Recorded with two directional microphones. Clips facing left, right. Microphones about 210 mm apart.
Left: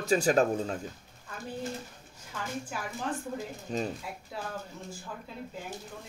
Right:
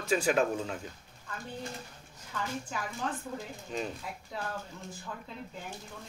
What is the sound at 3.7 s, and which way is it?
Speech, 35° left (ahead or behind).